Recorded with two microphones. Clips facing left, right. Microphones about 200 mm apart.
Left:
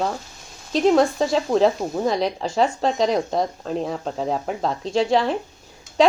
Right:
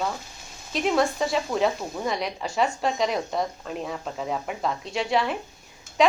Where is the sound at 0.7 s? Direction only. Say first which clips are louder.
Left 6 dB; 30° left (ahead or behind).